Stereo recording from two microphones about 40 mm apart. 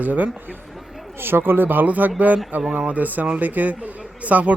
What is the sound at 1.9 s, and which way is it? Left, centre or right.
A man's voice, right.